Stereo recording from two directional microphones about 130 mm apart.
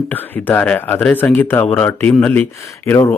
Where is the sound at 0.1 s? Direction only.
15° left (ahead or behind).